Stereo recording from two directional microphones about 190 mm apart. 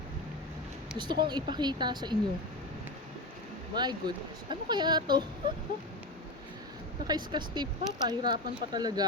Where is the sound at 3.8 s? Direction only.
20° right (ahead or behind).